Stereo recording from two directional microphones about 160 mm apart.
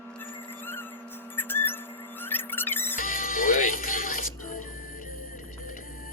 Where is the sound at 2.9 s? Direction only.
60° left (ahead or behind).